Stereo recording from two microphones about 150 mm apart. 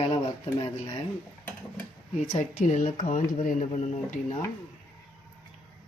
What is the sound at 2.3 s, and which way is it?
Speech, 55° left (ahead or behind).